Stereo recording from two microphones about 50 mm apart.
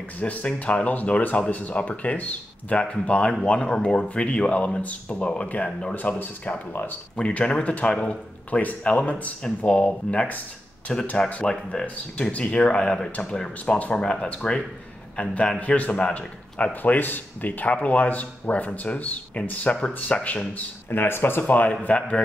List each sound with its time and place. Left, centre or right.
0.2 s speech: left
5.9 s speech: left
7.2 s speech: left
10.9 s speech: centre; by 20.2 s left
20.2 s speech: left
20.5 s speech: left
21.8 s speech: left